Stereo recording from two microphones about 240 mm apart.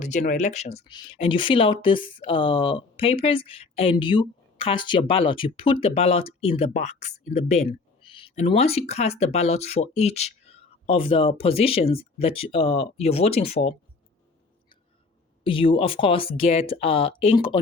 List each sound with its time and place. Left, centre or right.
0.0 s speech: left
15.4 s speech: left